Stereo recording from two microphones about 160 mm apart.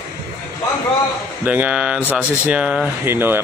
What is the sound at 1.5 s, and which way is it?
Speech, 10° right (ahead or behind).